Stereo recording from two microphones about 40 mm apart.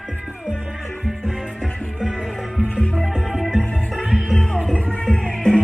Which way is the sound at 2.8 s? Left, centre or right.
Centre.